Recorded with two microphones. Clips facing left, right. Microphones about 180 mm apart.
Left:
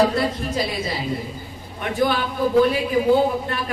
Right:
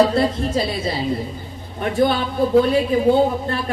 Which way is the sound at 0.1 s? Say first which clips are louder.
Right 4 dB; 30° right (ahead or behind).